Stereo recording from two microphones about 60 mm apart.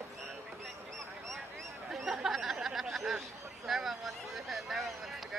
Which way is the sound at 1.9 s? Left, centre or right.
Centre.